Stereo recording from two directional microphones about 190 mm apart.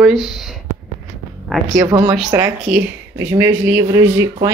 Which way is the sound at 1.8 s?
15° right (ahead or behind).